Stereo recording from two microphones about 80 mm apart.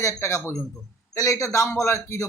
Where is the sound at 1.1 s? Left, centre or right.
Left.